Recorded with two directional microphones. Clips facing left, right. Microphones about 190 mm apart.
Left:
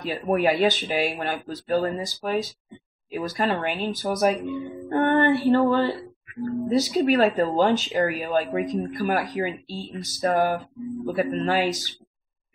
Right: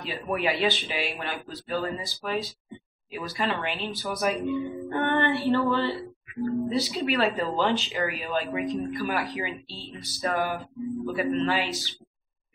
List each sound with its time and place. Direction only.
0.0 s speech: 45° left (ahead or behind)
4.6 s music: 50° left (ahead or behind)
6.7 s speech: 45° left (ahead or behind)